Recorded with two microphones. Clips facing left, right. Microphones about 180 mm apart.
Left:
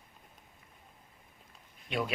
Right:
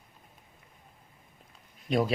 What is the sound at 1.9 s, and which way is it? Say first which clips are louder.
Speech: right 7 dB; 40° right (ahead or behind).